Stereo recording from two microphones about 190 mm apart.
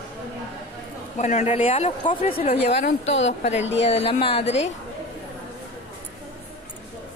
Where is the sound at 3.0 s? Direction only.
80° left.